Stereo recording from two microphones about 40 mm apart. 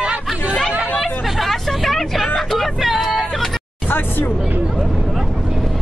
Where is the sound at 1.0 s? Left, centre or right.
Centre.